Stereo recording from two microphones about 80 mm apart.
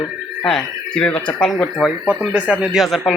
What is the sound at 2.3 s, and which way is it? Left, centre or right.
Speech, centre.